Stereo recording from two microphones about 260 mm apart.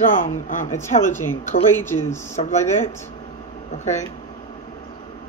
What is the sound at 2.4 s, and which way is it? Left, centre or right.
Speech, left.